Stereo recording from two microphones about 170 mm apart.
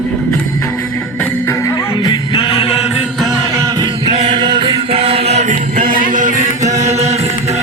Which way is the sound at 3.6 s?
25° right (ahead or behind).